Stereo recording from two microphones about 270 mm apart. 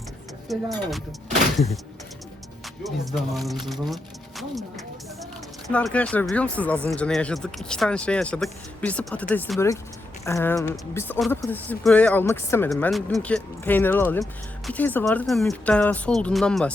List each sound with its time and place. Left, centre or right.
0.4 s speech: centre
2.8 s speech: centre
5.6 s speech: centre